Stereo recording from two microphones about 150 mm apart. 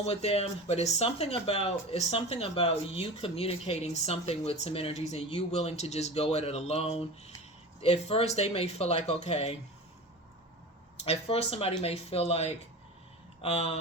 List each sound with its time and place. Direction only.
0.0 s speech: 45° left (ahead or behind)
11.0 s speech: 40° left (ahead or behind)